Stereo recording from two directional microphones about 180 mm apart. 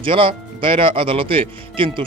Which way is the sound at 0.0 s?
30° right (ahead or behind).